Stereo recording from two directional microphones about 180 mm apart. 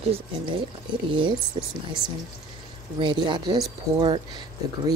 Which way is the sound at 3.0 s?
25° right (ahead or behind).